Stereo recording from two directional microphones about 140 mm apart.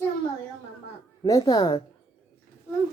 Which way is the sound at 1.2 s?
25° left (ahead or behind).